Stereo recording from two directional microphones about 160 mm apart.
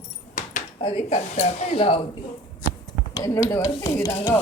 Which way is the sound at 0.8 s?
40° left (ahead or behind).